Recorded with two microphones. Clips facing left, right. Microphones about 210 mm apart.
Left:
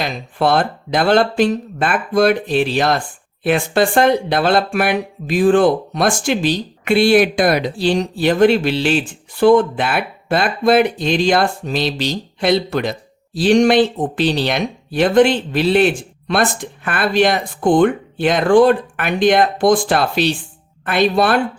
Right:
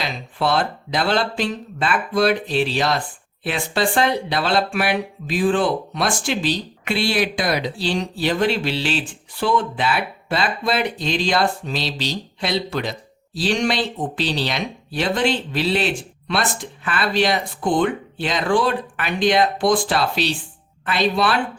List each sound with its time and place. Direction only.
0.0 s speech: 50° left (ahead or behind)